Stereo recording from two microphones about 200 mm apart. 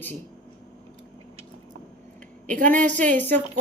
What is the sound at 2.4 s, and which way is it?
Speech, 40° right (ahead or behind).